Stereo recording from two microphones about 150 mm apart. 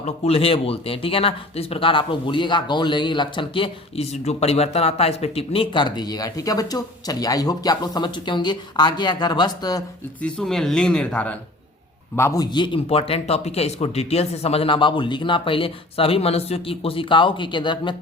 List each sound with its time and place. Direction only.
0.0 s a man's voice: 40° left (ahead or behind)
10.2 s speech: 5° left (ahead or behind)
12.1 s a man's voice: 20° left (ahead or behind)